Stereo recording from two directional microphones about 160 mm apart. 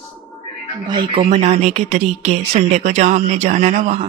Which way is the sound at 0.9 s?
30° right (ahead or behind).